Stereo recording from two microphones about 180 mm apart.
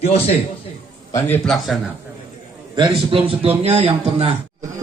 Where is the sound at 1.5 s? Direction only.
Centre (ahead or behind).